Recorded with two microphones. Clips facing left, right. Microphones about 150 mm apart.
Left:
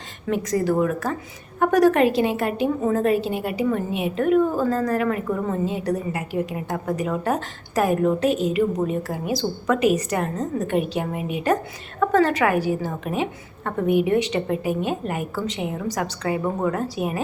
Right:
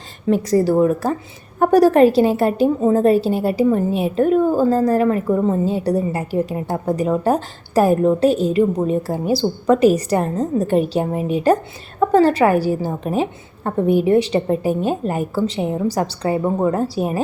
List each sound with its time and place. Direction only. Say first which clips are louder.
0.3 s a woman's voice: right 6 dB; 35° right (ahead or behind)